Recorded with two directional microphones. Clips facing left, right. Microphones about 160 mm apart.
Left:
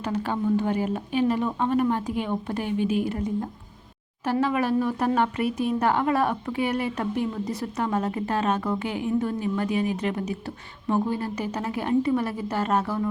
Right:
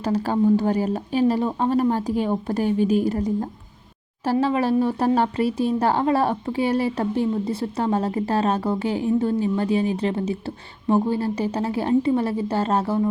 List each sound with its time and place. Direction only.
0.0 s speech: 35° right (ahead or behind)